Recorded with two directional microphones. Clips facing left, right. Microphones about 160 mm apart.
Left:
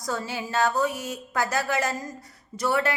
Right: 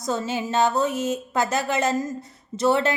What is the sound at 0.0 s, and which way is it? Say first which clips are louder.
A woman's voice: right 5 dB; 20° right (ahead or behind).